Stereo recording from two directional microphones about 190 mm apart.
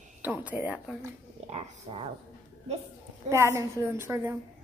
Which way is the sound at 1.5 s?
30° right (ahead or behind).